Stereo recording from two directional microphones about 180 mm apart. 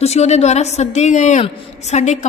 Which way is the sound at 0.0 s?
35° left (ahead or behind).